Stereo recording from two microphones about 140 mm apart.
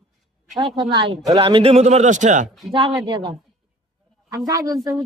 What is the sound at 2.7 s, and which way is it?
Speech, 35° right (ahead or behind).